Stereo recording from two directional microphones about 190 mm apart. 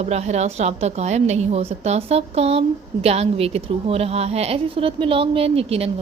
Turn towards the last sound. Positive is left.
turn(degrees=-30)  # may be behind; listen again after turning